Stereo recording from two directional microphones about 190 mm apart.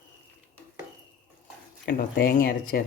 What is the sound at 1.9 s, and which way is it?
Speech, 50° left (ahead or behind).